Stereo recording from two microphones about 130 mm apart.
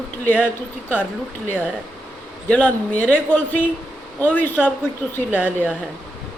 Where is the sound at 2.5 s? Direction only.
10° left (ahead or behind).